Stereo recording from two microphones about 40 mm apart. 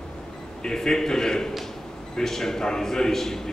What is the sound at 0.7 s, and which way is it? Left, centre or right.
A man's voice, centre.